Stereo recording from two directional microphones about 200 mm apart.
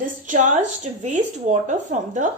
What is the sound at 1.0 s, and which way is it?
Speech, 35° right (ahead or behind).